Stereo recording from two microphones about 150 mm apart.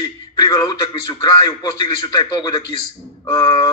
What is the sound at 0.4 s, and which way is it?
Speech, 25° left (ahead or behind).